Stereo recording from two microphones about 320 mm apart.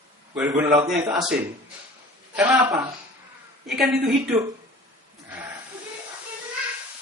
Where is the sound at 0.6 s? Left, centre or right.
Right.